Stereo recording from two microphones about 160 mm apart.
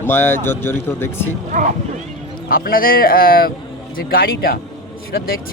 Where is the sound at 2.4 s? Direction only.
65° left (ahead or behind).